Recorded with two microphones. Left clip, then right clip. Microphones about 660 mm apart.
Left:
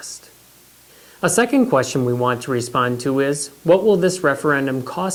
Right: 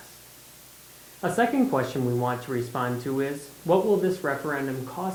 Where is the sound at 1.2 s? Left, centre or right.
Left.